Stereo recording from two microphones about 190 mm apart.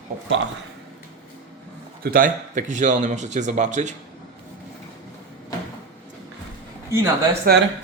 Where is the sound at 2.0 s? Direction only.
45° right (ahead or behind).